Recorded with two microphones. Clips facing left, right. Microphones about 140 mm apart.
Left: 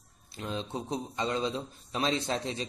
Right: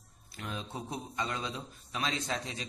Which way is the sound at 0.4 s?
25° left (ahead or behind).